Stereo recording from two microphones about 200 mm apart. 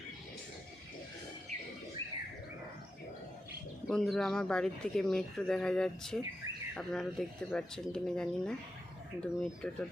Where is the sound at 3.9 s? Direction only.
Centre (ahead or behind).